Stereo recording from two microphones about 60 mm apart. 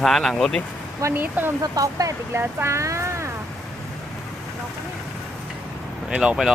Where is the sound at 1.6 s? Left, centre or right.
Right.